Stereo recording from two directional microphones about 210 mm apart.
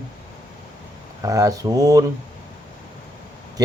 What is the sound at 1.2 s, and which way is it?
Speech, 15° right (ahead or behind).